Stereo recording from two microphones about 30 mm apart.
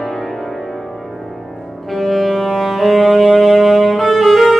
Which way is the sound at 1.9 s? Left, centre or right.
Centre.